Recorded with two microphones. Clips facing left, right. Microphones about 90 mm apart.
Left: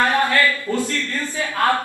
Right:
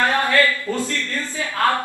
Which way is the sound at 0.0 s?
20° left (ahead or behind).